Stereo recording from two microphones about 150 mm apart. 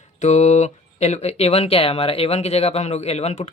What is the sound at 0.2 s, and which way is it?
Speech, 50° left (ahead or behind).